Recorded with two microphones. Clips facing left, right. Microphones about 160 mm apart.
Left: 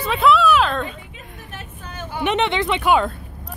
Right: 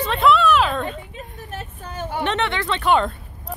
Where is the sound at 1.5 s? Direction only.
35° right (ahead or behind).